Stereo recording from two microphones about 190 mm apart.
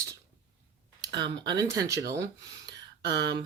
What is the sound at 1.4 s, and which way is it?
Speech, 20° right (ahead or behind).